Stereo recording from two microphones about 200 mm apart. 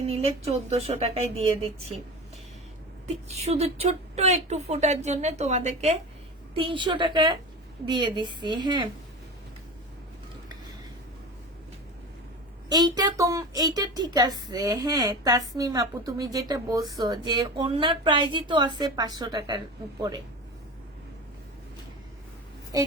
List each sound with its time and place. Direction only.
0.1 s speech: 30° right (ahead or behind)
3.3 s a woman's voice: 30° right (ahead or behind)
12.6 s a woman's voice: 20° right (ahead or behind)